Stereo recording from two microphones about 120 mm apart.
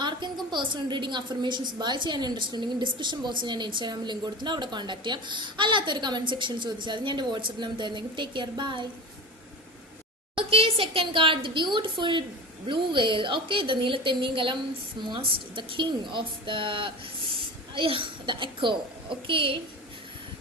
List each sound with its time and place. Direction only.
0.0 s a sound: 40° right (ahead or behind)
0.5 s a woman's voice: 40° right (ahead or behind)
10.3 s a woman's voice: 50° right (ahead or behind)